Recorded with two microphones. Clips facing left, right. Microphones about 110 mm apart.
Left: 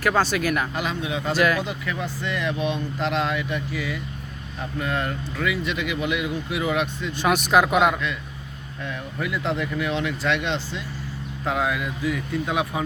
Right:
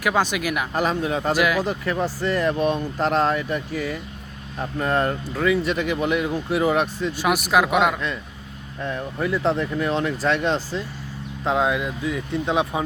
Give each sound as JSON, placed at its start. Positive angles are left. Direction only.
{"t": 0.0, "sound": "speech", "side_deg": -15}
{"t": 0.7, "sound": "speech", "side_deg": -40}
{"t": 1.4, "sound": "speech", "side_deg": -10}
{"t": 1.6, "sound": "speech", "side_deg": -40}
{"t": 7.1, "sound": "speech", "side_deg": -5}
{"t": 8.8, "sound": "speech", "side_deg": -35}
{"t": 11.4, "sound": "speech", "side_deg": -25}